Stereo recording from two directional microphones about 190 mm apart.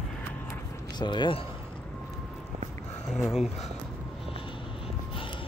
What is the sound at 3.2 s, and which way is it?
Speech, centre (ahead or behind).